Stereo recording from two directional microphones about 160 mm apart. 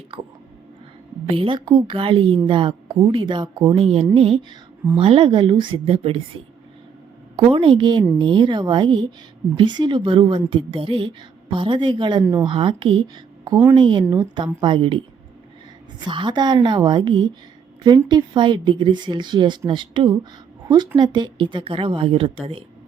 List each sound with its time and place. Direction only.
1.3 s a woman's voice: 35° right (ahead or behind)
7.3 s a woman's voice: 35° right (ahead or behind)
12.2 s speech: 10° right (ahead or behind)
12.5 s a woman's voice: 30° right (ahead or behind)
16.0 s a woman's voice: 30° right (ahead or behind)